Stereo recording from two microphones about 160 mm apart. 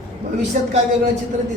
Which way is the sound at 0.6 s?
50° right (ahead or behind).